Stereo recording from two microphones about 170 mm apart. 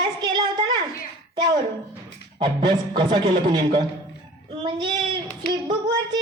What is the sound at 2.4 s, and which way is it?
A child's voice, 30° right (ahead or behind).